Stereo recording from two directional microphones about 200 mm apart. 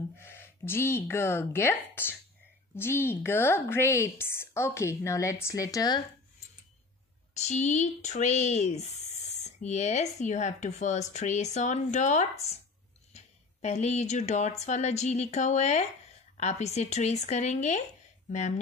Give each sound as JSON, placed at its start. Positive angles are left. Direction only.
{"t": 0.2, "sound": "a woman's voice", "side_deg": 10}
{"t": 7.3, "sound": "speech", "side_deg": 35}